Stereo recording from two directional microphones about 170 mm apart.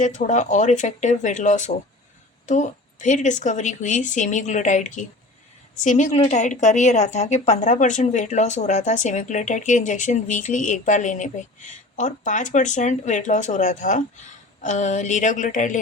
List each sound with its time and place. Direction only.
0.0 s a woman's voice: 45° left (ahead or behind)